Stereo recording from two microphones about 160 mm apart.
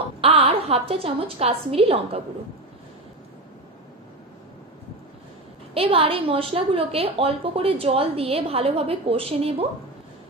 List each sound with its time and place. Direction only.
0.2 s a woman's voice: 40° right (ahead or behind)
5.8 s a woman's voice: 35° right (ahead or behind)